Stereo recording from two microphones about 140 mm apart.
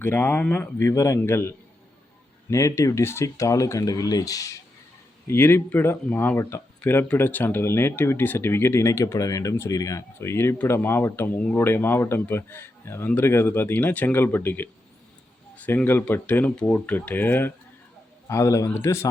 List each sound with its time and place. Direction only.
0.0 s speech: 15° left (ahead or behind)